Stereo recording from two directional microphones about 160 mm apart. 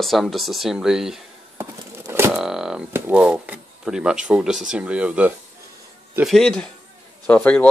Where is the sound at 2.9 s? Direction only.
10° right (ahead or behind).